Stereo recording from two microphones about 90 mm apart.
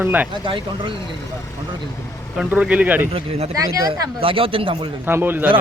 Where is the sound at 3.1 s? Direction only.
90° right.